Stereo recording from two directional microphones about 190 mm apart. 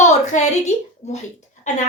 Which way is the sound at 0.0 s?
40° left (ahead or behind).